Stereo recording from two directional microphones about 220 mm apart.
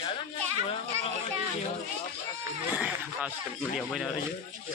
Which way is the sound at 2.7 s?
5° right (ahead or behind).